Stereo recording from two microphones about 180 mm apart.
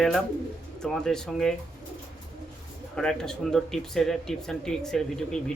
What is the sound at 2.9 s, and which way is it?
Speech, 5° left (ahead or behind).